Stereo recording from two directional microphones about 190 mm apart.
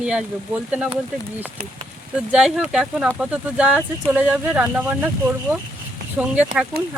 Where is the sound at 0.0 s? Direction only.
5° right (ahead or behind).